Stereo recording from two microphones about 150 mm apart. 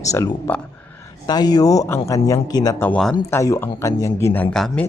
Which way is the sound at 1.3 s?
25° left (ahead or behind).